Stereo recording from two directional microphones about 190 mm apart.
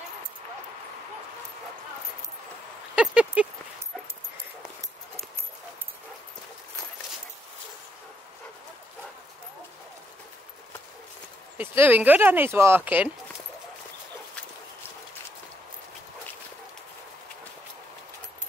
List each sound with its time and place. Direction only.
3.0 s speech: 5° right (ahead or behind)
11.5 s speech: 10° right (ahead or behind)